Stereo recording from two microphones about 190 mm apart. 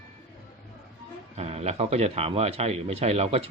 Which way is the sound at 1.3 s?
35° right (ahead or behind).